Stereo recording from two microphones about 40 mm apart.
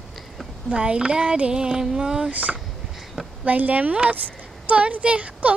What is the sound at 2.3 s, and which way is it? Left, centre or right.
Speech, right.